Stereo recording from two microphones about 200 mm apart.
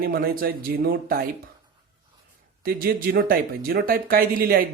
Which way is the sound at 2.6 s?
50° right (ahead or behind).